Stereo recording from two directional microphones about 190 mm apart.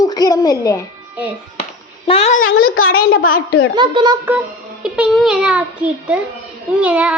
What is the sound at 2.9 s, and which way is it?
Speech, 50° left (ahead or behind).